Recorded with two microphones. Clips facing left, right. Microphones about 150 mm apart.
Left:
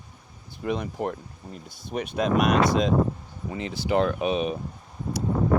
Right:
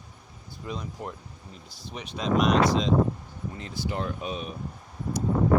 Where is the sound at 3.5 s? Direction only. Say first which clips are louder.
Left 7 dB; 85° left.